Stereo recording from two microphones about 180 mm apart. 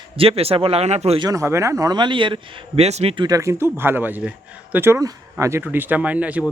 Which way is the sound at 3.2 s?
15° right (ahead or behind).